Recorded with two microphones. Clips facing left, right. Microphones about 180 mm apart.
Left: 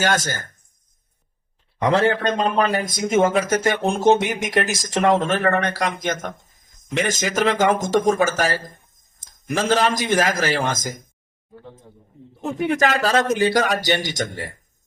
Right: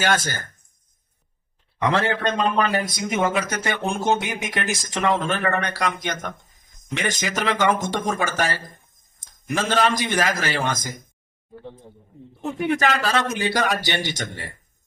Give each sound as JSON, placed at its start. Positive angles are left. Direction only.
{"t": 0.0, "sound": "speech", "side_deg": 45}
{"t": 2.4, "sound": "speech", "side_deg": 40}
{"t": 12.4, "sound": "speech", "side_deg": 45}